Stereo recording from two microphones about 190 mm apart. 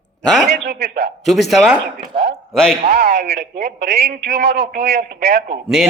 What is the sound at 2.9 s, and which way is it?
A man's voice, 55° right (ahead or behind).